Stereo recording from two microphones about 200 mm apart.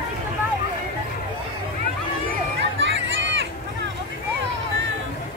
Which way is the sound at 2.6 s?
65° right (ahead or behind).